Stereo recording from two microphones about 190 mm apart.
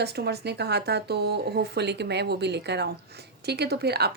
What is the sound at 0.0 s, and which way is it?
A woman's voice, 60° right (ahead or behind).